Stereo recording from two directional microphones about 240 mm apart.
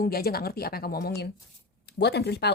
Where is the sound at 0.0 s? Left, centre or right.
Left.